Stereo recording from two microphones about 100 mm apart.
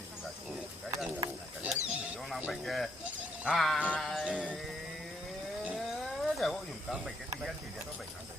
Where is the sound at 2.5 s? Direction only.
Centre (ahead or behind).